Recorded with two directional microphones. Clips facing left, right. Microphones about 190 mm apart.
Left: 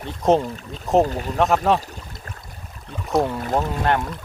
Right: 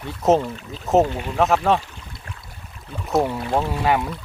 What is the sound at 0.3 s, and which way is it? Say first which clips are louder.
Speech: even; centre (ahead or behind).